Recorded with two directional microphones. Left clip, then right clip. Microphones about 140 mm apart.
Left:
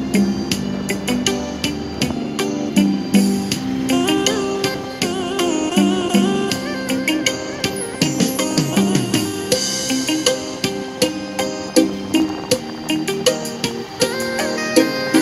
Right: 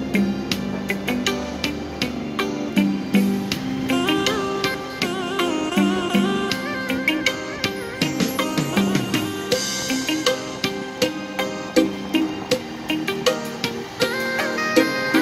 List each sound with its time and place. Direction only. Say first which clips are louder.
0.1 s music: left 3 dB; 30° left (ahead or behind)
2.3 s music: left 2 dB; 30° left (ahead or behind)
13.9 s music: left 2 dB; 30° left (ahead or behind)